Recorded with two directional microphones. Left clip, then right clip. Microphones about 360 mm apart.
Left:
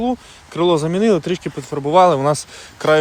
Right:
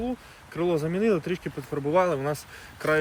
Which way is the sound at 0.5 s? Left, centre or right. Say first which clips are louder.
Left 10 dB; centre.